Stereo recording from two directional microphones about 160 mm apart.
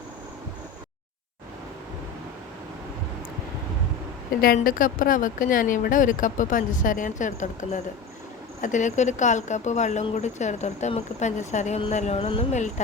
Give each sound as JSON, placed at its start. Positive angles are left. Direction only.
{"t": 4.4, "sound": "speech", "side_deg": 65}